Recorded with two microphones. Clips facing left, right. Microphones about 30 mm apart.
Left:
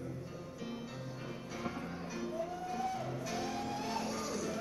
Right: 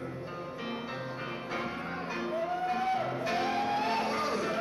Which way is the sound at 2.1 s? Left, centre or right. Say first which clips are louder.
Right 7 dB; right.